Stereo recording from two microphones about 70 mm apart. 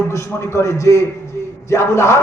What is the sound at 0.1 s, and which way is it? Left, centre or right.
A man's voice, left.